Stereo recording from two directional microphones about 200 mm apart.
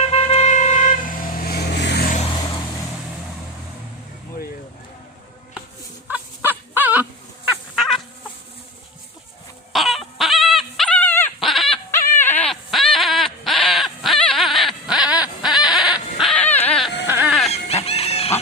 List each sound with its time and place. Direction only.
0.1 s vehicle: 30° left (ahead or behind); by 2.0 s 55° left (ahead or behind)
2.0 s vehicle: 35° left (ahead or behind)
6.1 s fowl: 10° right (ahead or behind)
9.7 s dog: centre (ahead or behind)
11.9 s a sound: 10° left (ahead or behind)
17.2 s dog: centre (ahead or behind)
17.7 s chicken: 30° left (ahead or behind)